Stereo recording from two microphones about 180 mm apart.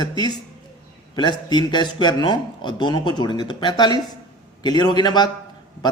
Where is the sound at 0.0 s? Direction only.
25° left (ahead or behind).